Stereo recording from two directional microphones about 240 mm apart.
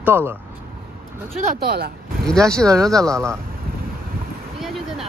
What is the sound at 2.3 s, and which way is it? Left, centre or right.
Speech, centre.